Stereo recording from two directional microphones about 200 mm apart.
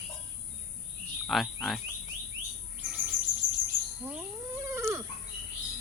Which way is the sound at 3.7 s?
30° right (ahead or behind).